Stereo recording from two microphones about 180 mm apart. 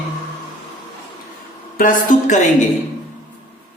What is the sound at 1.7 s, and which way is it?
Speech, 45° left (ahead or behind).